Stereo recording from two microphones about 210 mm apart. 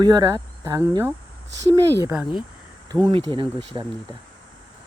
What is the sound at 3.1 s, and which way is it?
Speech, 25° right (ahead or behind).